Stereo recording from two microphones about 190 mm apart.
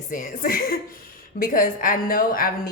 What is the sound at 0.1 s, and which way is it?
A woman's voice, 45° left (ahead or behind).